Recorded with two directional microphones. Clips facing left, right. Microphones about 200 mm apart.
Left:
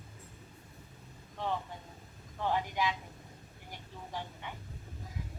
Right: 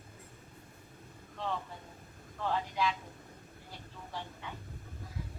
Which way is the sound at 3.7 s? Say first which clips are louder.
Left 2 dB; 15° left (ahead or behind).